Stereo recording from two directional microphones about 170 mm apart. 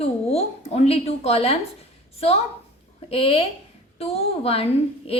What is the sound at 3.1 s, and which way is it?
A woman's voice, 35° left (ahead or behind).